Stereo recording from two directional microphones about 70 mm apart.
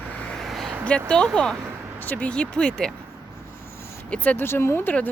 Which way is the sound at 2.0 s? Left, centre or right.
Left.